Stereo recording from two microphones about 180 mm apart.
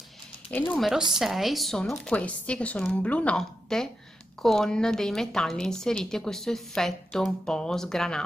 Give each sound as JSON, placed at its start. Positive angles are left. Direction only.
{"t": 0.5, "sound": "a woman's voice", "side_deg": 5}